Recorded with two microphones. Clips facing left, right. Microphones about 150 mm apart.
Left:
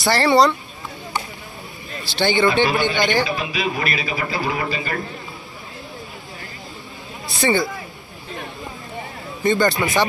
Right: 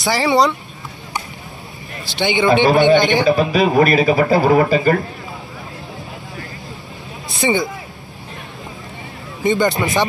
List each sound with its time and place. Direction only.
0.0 s speech: centre (ahead or behind)
2.1 s speech: 20° right (ahead or behind)
2.6 s speech: 50° right (ahead or behind)
3.0 s speech: 20° right (ahead or behind)
3.3 s speech: 45° right (ahead or behind)
7.2 s speech: 20° right (ahead or behind)
9.5 s speech: 20° right (ahead or behind)